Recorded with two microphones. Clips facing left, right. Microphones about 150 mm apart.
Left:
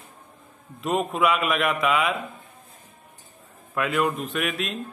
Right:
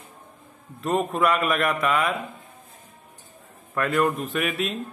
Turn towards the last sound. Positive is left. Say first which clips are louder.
# right 2 dB
turn(degrees=0)  # may be behind; listen again after turning